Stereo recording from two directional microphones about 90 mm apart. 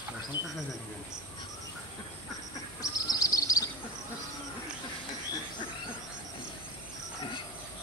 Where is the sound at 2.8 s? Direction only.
40° left (ahead or behind).